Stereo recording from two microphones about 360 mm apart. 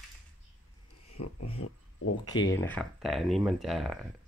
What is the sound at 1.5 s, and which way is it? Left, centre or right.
Speech, left.